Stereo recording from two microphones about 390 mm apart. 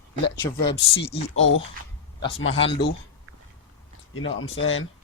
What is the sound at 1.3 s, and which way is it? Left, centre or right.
Speech, left.